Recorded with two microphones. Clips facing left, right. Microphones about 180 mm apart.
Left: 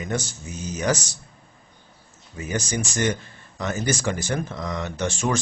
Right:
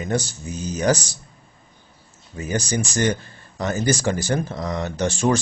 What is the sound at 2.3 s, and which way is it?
Speech, 35° right (ahead or behind).